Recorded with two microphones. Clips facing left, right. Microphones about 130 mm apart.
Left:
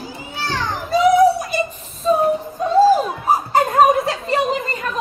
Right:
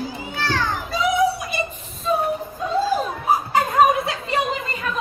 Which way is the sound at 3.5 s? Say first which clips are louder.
Left 3 dB; 40° left (ahead or behind).